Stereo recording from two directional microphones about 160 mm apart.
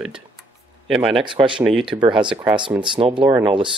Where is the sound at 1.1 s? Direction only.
30° right (ahead or behind).